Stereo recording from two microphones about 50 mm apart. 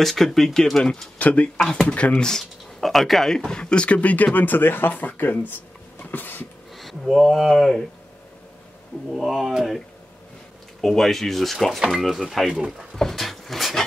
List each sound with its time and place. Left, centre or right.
0.0 s speech: centre
1.1 s speech: left
2.2 s speech: centre
3.3 s speech: centre; by 6.4 s left
6.8 s speech: centre
9.1 s speech: centre
10.8 s speech: centre
12.9 s speech: centre